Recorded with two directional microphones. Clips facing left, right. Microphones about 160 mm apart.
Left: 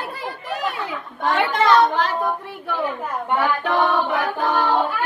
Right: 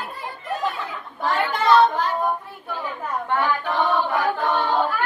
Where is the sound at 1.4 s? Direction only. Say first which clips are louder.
Even; 90° left.